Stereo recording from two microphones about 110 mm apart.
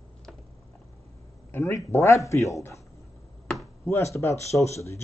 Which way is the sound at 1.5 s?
20° left (ahead or behind).